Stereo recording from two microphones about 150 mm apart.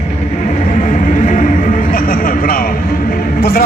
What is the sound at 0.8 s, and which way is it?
Music, 60° left (ahead or behind).